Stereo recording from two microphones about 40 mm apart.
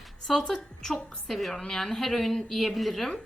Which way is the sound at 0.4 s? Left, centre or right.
Centre.